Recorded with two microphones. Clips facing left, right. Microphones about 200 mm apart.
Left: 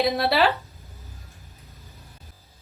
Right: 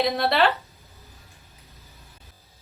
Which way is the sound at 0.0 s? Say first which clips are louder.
Even; centre (ahead or behind).